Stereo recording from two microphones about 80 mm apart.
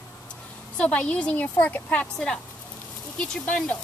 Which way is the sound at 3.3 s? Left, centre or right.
Centre.